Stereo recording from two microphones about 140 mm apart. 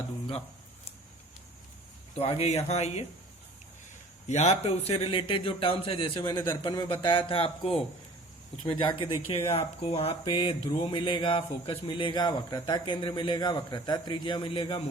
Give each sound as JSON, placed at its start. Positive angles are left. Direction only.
{"t": 2.1, "sound": "speech", "side_deg": 45}
{"t": 4.3, "sound": "speech", "side_deg": 55}
{"t": 8.6, "sound": "speech", "side_deg": 35}